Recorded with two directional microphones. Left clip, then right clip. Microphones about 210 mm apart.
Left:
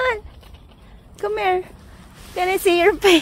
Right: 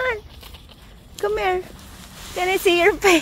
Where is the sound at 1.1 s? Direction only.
5° left (ahead or behind).